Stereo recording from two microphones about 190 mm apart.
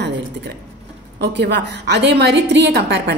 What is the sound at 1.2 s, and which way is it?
A woman's voice, 65° right (ahead or behind).